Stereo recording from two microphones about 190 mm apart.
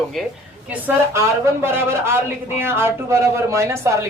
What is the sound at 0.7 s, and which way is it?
Speech, 15° right (ahead or behind).